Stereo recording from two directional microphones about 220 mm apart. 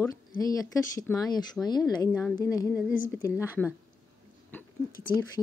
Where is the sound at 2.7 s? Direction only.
Centre (ahead or behind).